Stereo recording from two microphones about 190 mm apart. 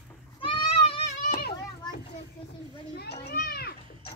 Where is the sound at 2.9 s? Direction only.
60° left (ahead or behind).